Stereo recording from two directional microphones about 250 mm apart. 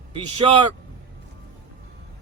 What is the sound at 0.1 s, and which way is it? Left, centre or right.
Speech, right.